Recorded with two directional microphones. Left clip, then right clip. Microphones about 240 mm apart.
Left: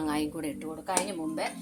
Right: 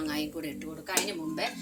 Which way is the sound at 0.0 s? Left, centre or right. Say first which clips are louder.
Left 2 dB; left.